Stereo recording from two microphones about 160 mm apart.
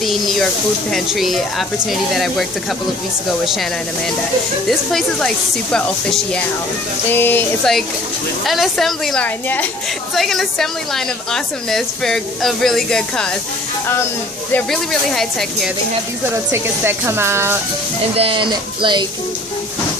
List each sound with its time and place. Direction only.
0.0 s a woman's voice: centre (ahead or behind)
4.6 s a woman's voice: 5° left (ahead or behind)
8.5 s a woman's voice: centre (ahead or behind)
14.5 s a woman's voice: centre (ahead or behind)
16.5 s speech: 15° right (ahead or behind)
18.1 s speech: 35° right (ahead or behind)